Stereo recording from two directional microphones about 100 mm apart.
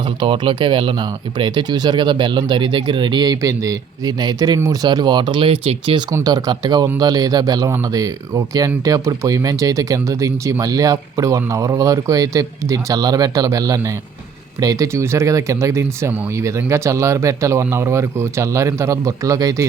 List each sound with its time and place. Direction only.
0.2 s speech: 55° right (ahead or behind)
6.2 s speech: 40° right (ahead or behind)